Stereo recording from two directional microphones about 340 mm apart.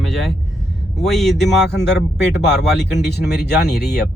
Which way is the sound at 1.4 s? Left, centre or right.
Left.